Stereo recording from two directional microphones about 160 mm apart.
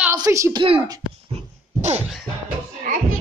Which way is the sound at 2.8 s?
60° right (ahead or behind).